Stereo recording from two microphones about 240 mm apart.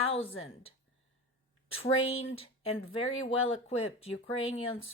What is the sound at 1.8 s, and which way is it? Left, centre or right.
Speech, left.